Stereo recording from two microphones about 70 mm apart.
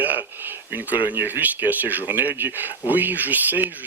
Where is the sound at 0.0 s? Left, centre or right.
Right.